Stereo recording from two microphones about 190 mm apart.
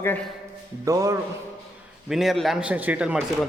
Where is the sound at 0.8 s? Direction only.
15° right (ahead or behind).